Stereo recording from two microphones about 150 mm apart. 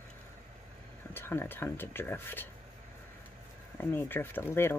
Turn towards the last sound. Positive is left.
turn(degrees=15)  # may be behind; listen again after turning